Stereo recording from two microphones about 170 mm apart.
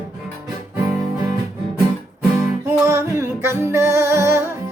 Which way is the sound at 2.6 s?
15° right (ahead or behind).